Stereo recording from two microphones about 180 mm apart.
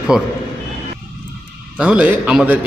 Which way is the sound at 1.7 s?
5° right (ahead or behind).